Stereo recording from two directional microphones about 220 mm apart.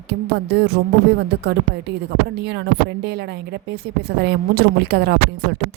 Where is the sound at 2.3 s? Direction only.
50° right (ahead or behind).